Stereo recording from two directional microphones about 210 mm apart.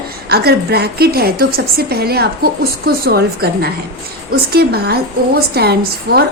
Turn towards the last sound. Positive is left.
turn(degrees=-45)  # may be behind; listen again after turning